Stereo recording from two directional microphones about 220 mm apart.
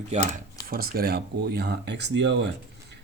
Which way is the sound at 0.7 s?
45° right (ahead or behind).